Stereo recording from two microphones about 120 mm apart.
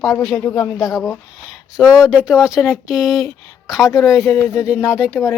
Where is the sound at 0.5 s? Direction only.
30° left (ahead or behind).